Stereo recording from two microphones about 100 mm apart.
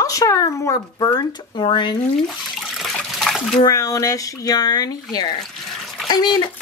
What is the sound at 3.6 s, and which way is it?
A woman's voice, 35° left (ahead or behind).